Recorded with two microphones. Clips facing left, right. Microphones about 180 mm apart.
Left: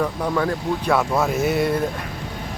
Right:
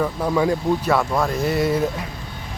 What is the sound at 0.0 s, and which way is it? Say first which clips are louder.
Speech: right 2 dB; 10° right (ahead or behind).